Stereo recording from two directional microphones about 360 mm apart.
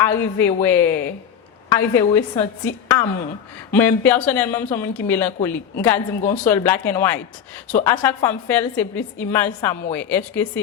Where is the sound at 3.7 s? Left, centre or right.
Centre.